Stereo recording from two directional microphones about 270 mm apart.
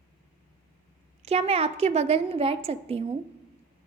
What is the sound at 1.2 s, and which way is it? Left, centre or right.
A woman's voice, right.